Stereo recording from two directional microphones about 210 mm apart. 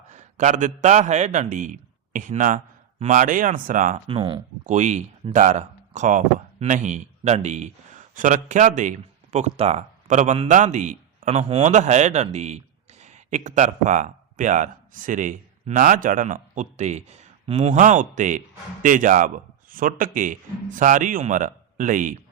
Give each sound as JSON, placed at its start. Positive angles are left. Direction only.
{"t": 0.1, "sound": "a man's voice", "side_deg": -35}
{"t": 4.6, "sound": "a man's voice", "side_deg": -35}